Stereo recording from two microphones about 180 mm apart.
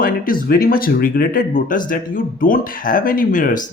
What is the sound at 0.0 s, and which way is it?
Speech, 55° left (ahead or behind).